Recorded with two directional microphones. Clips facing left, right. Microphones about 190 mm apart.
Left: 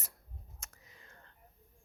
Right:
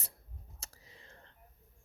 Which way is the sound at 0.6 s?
30° right (ahead or behind).